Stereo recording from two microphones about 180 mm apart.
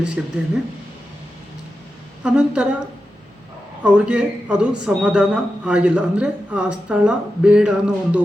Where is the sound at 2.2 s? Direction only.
5° right (ahead or behind).